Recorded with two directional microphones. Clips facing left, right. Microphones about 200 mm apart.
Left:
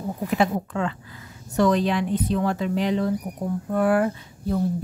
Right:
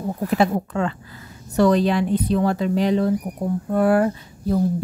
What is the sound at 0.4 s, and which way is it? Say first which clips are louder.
Speech: right 3 dB; 40° right (ahead or behind).